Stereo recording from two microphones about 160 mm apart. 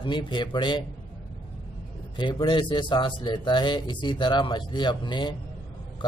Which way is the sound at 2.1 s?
30° left (ahead or behind).